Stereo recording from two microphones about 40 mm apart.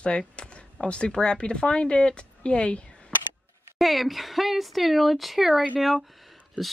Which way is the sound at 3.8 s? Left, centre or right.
Centre.